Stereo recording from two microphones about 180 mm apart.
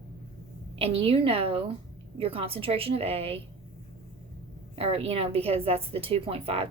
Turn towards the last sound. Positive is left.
turn(degrees=-30)  # may be behind; listen again after turning